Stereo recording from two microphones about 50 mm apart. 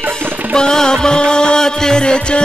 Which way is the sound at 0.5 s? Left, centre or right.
Centre.